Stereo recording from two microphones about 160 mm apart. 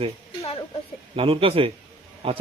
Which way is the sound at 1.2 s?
35° right (ahead or behind).